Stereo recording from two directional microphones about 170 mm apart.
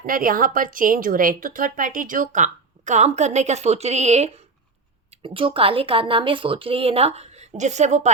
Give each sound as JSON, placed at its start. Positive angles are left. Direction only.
{"t": 0.0, "sound": "a woman's voice", "side_deg": -55}